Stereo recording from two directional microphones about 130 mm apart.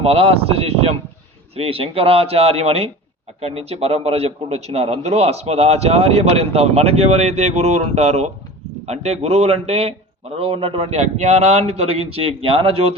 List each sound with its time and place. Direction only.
0.0 s a man's voice: 50° right (ahead or behind)